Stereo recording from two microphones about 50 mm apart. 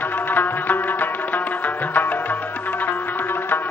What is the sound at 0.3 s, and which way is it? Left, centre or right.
Music, left.